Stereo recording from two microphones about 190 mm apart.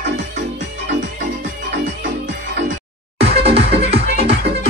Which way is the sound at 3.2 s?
30° right (ahead or behind).